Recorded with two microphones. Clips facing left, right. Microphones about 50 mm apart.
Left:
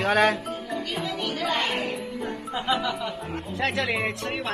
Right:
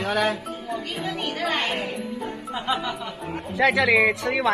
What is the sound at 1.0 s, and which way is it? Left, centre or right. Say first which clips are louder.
Speech: right 1 dB; right.